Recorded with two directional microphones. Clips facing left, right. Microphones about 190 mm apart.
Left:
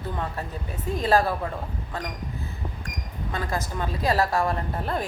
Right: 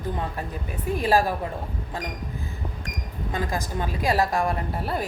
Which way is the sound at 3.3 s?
15° right (ahead or behind).